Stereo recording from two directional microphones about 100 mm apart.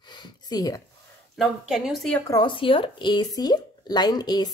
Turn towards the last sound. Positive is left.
turn(degrees=40)  # may be behind; listen again after turning